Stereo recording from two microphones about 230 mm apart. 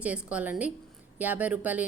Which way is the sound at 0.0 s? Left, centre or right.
Centre.